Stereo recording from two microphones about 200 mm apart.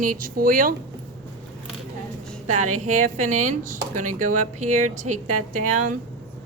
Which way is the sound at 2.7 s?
35° right (ahead or behind).